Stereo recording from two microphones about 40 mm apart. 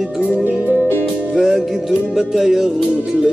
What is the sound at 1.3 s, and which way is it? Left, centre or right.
Music, centre.